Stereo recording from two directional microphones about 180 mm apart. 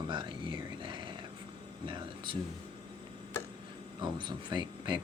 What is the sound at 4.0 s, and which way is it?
Speech, 25° right (ahead or behind).